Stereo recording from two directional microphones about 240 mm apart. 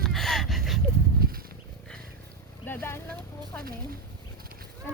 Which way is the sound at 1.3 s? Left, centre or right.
Right.